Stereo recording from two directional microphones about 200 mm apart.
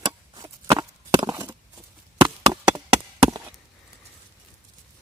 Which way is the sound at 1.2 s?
15° right (ahead or behind).